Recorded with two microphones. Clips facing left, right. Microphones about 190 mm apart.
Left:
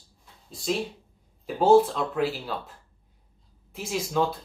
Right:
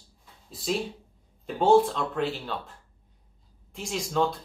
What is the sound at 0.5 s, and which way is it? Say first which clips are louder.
Speech: left 1 dB; centre (ahead or behind).